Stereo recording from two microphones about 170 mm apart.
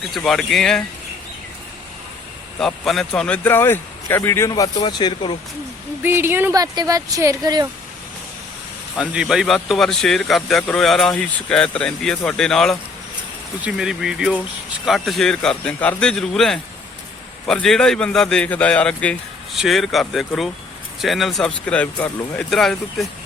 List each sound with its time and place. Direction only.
0.2 s speech: centre (ahead or behind)
2.6 s speech: centre (ahead or behind); by 5.4 s 25° left (ahead or behind)
6.0 s speech: 15° right (ahead or behind)
9.0 s speech: 5° right (ahead or behind)